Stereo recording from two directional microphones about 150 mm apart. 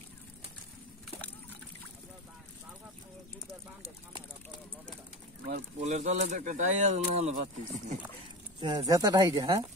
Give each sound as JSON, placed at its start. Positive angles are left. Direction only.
{"t": 5.8, "sound": "speech", "side_deg": -45}
{"t": 8.5, "sound": "speech", "side_deg": -30}